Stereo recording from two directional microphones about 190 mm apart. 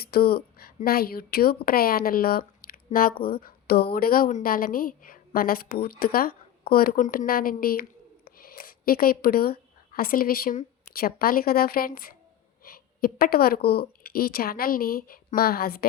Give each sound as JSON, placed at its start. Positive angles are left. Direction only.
{"t": 0.0, "sound": "a woman's voice", "side_deg": 55}